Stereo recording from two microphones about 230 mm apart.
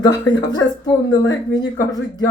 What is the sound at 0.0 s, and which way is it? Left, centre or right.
Speech, centre.